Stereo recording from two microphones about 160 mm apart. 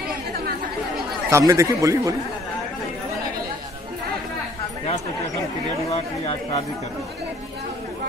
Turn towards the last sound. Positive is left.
turn(degrees=45)  # may be behind; listen again after turning